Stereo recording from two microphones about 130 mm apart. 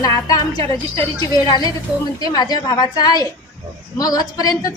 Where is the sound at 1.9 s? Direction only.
5° right (ahead or behind).